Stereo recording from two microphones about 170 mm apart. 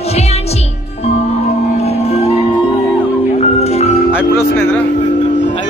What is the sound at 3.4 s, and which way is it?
Music, 40° left (ahead or behind).